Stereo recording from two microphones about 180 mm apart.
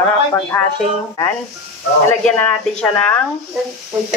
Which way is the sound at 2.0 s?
10° left (ahead or behind).